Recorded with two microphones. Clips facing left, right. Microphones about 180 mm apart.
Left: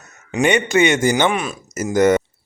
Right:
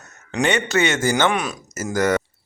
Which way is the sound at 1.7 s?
20° left (ahead or behind).